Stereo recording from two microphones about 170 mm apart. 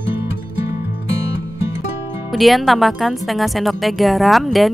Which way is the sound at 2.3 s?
Centre (ahead or behind).